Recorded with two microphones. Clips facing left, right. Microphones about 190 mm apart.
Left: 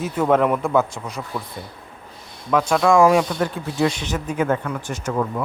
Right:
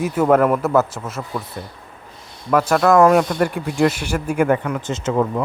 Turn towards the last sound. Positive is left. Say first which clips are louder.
# right 4 dB
turn(degrees=-25)  # may be behind; listen again after turning